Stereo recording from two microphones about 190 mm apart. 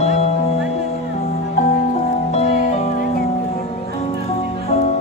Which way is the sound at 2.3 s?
35° left (ahead or behind).